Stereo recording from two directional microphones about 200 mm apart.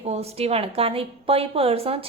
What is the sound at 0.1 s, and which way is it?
A woman's voice, 30° right (ahead or behind).